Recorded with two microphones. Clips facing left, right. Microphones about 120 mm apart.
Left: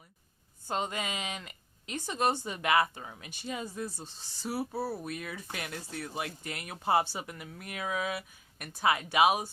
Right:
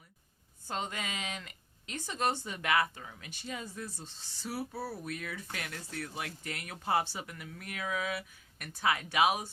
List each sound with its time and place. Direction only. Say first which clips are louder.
0.7 s speech: left 4 dB; 15° left (ahead or behind)